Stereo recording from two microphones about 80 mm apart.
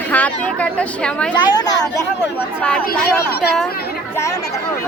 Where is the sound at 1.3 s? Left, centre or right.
Left.